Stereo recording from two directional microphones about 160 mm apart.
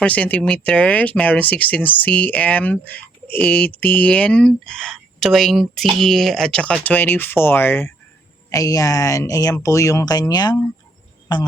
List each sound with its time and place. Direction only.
0.0 s speech: 10° left (ahead or behind); by 10.6 s 25° left (ahead or behind)